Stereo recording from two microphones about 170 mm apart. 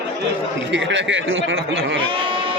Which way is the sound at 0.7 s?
90° right.